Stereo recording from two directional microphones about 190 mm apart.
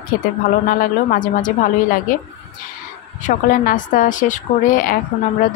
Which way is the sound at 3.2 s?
40° left (ahead or behind).